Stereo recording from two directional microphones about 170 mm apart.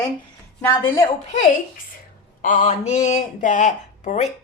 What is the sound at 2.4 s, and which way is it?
Speech, 50° left (ahead or behind).